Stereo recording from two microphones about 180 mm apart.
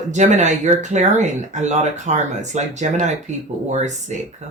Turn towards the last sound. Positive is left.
turn(degrees=-40)  # may be behind; listen again after turning